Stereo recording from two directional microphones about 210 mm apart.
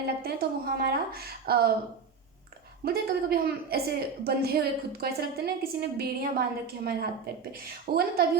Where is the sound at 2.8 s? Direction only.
45° right (ahead or behind).